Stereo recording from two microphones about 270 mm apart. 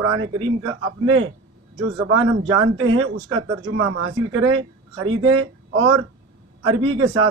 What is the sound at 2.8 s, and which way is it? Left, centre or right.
Speech, right.